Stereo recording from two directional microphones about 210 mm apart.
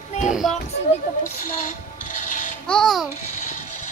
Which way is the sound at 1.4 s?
35° left (ahead or behind).